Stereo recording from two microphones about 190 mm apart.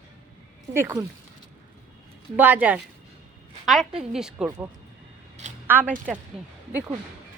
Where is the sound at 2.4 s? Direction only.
10° right (ahead or behind).